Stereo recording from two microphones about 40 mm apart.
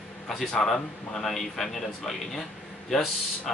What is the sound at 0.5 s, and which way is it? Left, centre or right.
A man's voice, centre.